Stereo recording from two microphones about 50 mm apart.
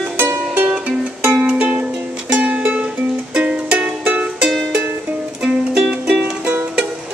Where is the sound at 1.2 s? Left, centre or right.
Right.